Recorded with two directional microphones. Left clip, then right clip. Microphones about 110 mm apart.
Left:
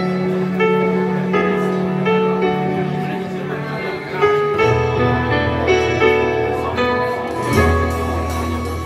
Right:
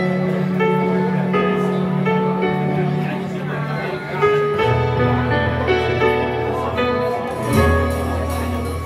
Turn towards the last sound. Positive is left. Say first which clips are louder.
# left 1 dB
turn(degrees=30)  # may be behind; listen again after turning